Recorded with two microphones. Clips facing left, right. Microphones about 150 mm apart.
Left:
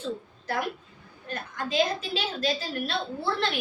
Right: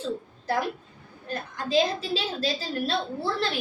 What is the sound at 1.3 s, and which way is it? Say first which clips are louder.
A woman's voice: right 4 dB; 35° right (ahead or behind).